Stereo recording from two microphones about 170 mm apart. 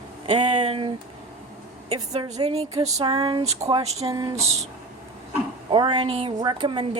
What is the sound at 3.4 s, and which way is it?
Speech, 40° right (ahead or behind).